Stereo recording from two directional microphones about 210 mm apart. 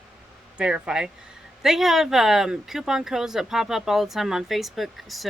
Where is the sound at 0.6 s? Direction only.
5° right (ahead or behind).